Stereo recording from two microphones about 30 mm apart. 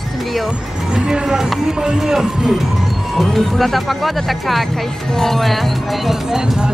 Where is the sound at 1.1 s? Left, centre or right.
Centre.